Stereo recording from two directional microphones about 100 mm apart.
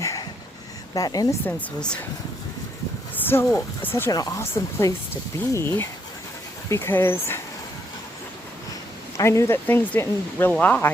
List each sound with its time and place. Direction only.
0.0 s a sound: 35° left (ahead or behind)
0.9 s speech: 40° left (ahead or behind)
3.2 s speech: 20° left (ahead or behind)
4.1 s speech: 35° left (ahead or behind)
9.1 s speech: 30° left (ahead or behind)